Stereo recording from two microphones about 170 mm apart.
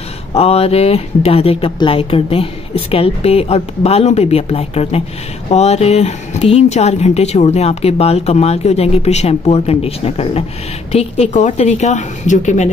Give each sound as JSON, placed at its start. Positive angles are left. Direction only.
{"t": 0.3, "sound": "speech", "side_deg": 35}